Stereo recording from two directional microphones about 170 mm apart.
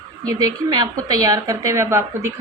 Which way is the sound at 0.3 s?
20° right (ahead or behind).